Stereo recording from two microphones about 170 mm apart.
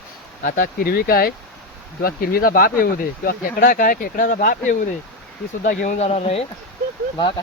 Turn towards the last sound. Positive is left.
turn(degrees=30)  # may be behind; listen again after turning